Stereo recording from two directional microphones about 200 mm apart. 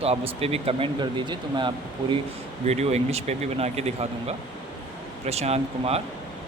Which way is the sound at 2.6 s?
35° right (ahead or behind).